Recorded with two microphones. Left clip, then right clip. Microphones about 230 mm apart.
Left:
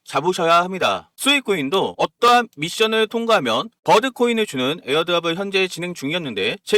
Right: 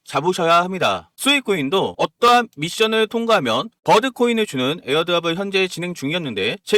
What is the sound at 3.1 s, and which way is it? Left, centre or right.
Speech, left.